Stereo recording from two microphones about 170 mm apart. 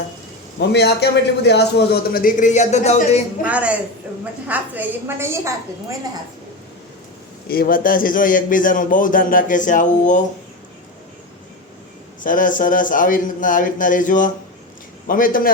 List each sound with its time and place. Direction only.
0.6 s a man's voice: 80° left; by 3.2 s 40° left (ahead or behind)
3.4 s a woman's voice: 10° right (ahead or behind)
4.1 s a sound: 10° right (ahead or behind)
4.4 s a woman's voice: 10° right (ahead or behind)
7.4 s a man's voice: 60° left (ahead or behind)
12.2 s a man's voice: 50° left (ahead or behind)